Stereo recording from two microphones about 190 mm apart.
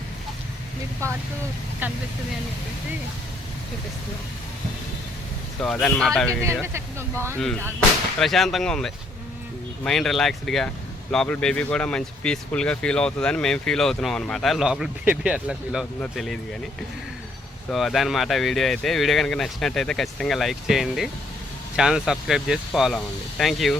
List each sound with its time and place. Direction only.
1.0 s speech: 15° right (ahead or behind)
5.6 s speech: 5° left (ahead or behind)
6.7 s speech: 15° right (ahead or behind)
8.2 s speech: centre (ahead or behind)
17.7 s speech: centre (ahead or behind)